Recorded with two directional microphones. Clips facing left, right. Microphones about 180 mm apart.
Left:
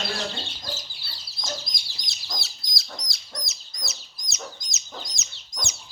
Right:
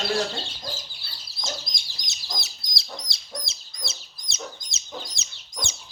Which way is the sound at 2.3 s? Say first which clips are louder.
Even; 25° right (ahead or behind).